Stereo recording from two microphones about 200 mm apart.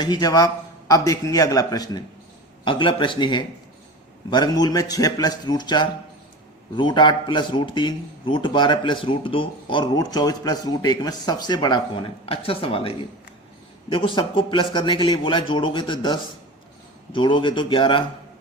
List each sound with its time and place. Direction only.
0.0 s speech: 20° left (ahead or behind)